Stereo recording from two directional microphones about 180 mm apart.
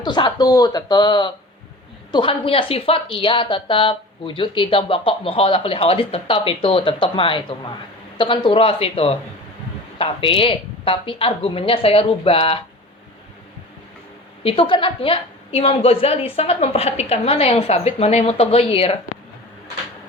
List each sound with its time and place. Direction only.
0.0 s a woman's voice: 25° left (ahead or behind)
14.4 s a woman's voice: 30° left (ahead or behind)